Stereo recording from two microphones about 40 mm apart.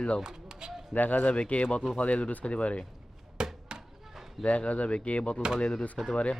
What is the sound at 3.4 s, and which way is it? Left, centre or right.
Chop, right.